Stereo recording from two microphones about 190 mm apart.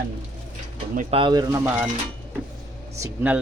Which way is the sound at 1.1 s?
25° right (ahead or behind).